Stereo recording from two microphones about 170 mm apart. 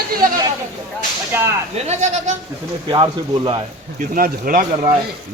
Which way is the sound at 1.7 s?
40° right (ahead or behind).